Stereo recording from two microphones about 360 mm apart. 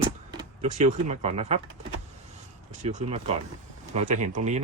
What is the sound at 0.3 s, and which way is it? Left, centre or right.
Speech, centre.